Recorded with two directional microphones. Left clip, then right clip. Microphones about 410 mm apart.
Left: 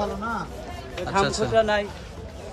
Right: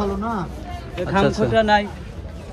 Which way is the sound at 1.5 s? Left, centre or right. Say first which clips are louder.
Right 4 dB; right.